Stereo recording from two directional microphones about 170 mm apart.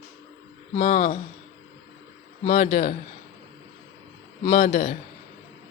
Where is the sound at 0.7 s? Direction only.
45° left (ahead or behind).